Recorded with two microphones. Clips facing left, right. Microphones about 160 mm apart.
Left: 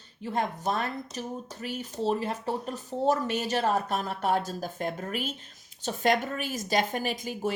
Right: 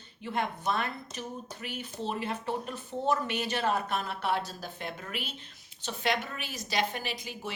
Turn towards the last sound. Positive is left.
turn(degrees=45)  # may be behind; listen again after turning